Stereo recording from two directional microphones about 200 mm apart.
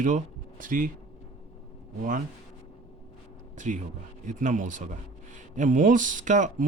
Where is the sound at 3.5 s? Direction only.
40° right (ahead or behind).